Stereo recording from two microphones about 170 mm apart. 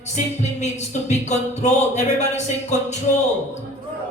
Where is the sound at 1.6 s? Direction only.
40° left (ahead or behind).